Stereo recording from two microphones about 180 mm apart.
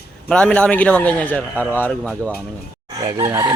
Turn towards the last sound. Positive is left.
turn(degrees=-15)  # may be behind; listen again after turning